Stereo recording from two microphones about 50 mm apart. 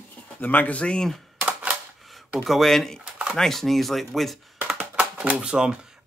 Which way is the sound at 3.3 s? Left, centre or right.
Centre.